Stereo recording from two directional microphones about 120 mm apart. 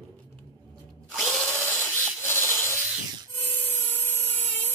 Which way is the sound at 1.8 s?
20° left (ahead or behind).